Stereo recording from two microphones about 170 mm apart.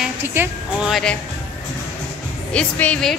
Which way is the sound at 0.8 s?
Centre (ahead or behind).